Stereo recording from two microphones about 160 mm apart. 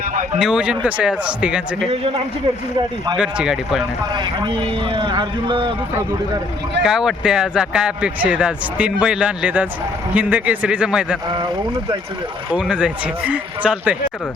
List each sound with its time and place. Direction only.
0.3 s speech: 5° right (ahead or behind)
3.2 s speech: 5° right (ahead or behind)
4.1 s a man's voice: 30° right (ahead or behind)
6.8 s speech: 5° right (ahead or behind)
12.5 s speech: 5° right (ahead or behind)